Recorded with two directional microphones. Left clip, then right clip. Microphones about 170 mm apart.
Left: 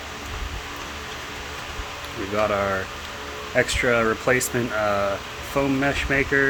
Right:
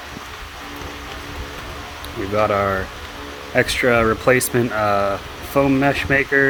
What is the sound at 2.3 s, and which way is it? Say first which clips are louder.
Speech: right 4 dB; 45° right (ahead or behind).